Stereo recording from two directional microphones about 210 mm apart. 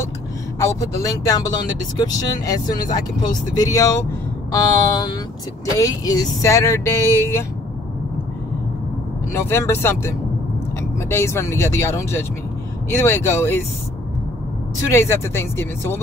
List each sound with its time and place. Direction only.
0.6 s speech: 15° left (ahead or behind)
4.5 s a sound: 20° left (ahead or behind)
5.8 s speech: 15° left (ahead or behind)
9.3 s speech: 10° left (ahead or behind)
14.9 s speech: 15° left (ahead or behind)